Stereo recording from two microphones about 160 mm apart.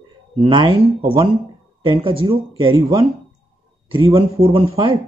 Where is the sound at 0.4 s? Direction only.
30° right (ahead or behind).